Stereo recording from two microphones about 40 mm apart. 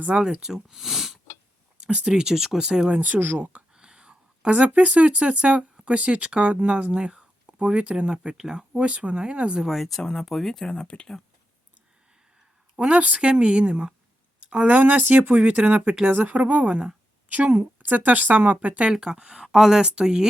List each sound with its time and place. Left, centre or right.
0.1 s speech: right
0.4 s speech: centre
2.0 s speech: centre
3.0 s speech: right
3.8 s speech: right
9.6 s speech: centre
10.0 s speech: centre
10.7 s speech: left
12.7 s speech: right
17.5 s speech: right
18.8 s speech: centre
19.8 s speech: right